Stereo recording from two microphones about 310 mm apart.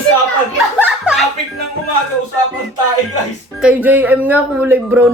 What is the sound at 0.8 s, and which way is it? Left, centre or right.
Chuckle, centre.